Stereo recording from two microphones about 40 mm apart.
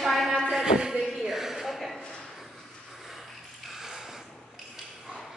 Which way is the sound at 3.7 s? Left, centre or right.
Centre.